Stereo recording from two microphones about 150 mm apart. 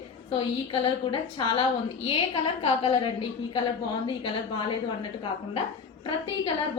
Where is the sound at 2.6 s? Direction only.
35° left (ahead or behind).